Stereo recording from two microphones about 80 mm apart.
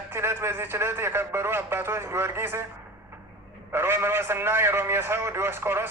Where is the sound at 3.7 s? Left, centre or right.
Right.